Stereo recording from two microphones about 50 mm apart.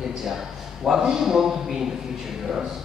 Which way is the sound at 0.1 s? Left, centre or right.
Centre.